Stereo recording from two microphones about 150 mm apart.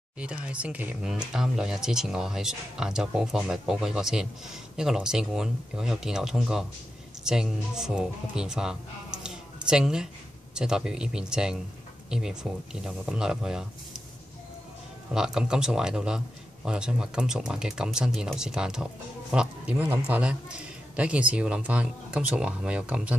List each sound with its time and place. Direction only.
0.2 s speech: 10° right (ahead or behind)
15.1 s a man's voice: 5° right (ahead or behind)